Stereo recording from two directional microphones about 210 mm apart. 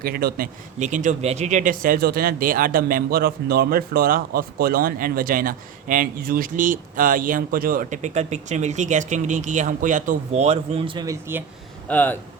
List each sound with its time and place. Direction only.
0.0 s speech: 45° right (ahead or behind); by 11.4 s 15° right (ahead or behind)
11.9 s speech: 10° left (ahead or behind)